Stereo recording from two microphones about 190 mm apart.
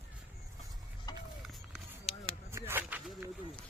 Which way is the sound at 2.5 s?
10° right (ahead or behind).